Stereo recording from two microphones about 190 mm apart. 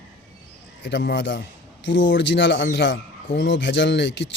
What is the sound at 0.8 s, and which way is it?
Speech, 65° left (ahead or behind).